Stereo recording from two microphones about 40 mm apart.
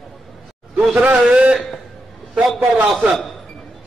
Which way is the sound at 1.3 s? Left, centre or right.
Right.